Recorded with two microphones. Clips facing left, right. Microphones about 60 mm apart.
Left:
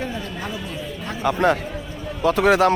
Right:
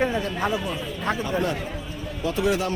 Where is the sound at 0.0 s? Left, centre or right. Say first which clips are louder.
Right 4 dB; right.